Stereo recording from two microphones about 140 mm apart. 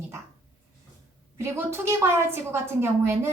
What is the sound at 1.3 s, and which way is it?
A woman's voice, 20° right (ahead or behind).